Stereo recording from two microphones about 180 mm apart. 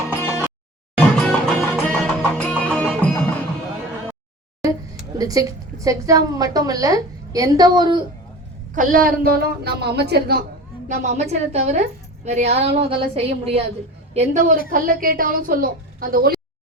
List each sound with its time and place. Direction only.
0.1 s music: 15° left (ahead or behind)
0.9 s music: 5° left (ahead or behind)
5.1 s a woman's voice: 20° right (ahead or behind)
8.7 s a woman's voice: 50° right (ahead or behind); by 10.4 s 65° right (ahead or behind)
10.8 s a woman's voice: 40° right (ahead or behind)